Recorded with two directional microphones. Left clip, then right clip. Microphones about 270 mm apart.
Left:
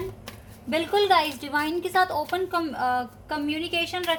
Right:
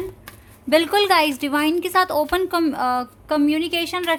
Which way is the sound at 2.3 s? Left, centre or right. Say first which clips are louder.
Right 6 dB; right.